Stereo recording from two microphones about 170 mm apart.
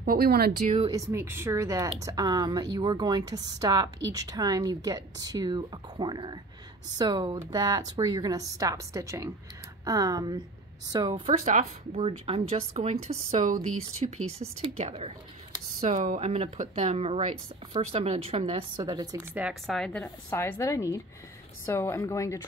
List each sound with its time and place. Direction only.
0.0 s speech: 60° right (ahead or behind)
0.8 s a woman's voice: 20° right (ahead or behind)
11.2 s speech: 40° right (ahead or behind)
19.3 s a woman's voice: 5° right (ahead or behind); by 22.4 s 20° left (ahead or behind)